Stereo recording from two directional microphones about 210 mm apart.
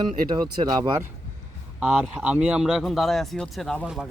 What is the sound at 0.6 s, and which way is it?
Speech, 20° right (ahead or behind).